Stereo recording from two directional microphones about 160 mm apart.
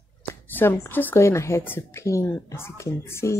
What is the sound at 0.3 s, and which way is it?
Speech, 15° left (ahead or behind).